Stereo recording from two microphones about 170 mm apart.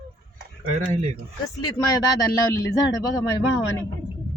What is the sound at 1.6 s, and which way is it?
Speech, 20° left (ahead or behind).